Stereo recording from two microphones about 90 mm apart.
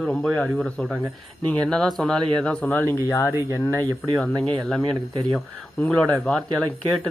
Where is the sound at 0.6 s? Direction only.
5° left (ahead or behind).